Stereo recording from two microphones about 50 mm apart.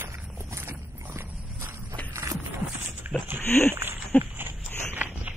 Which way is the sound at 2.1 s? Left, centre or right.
Right.